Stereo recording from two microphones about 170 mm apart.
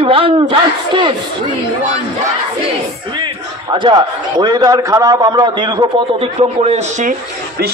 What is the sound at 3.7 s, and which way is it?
A man's voice, 30° right (ahead or behind).